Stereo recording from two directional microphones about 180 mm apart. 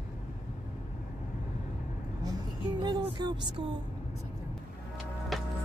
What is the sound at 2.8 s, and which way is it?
Speech, 25° right (ahead or behind).